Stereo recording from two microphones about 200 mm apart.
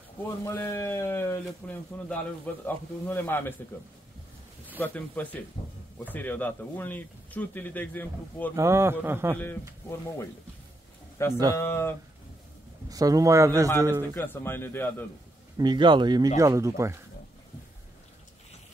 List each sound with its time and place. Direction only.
0.2 s speech: 10° left (ahead or behind)
4.7 s speech: 10° left (ahead or behind)
8.5 s a man's voice: 15° right (ahead or behind)
9.8 s speech: 15° left (ahead or behind)
12.9 s a man's voice: 15° right (ahead or behind)
14.1 s speech: 10° left (ahead or behind)
15.5 s a man's voice: 20° right (ahead or behind)